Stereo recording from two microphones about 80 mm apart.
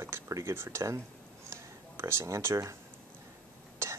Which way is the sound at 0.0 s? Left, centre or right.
Right.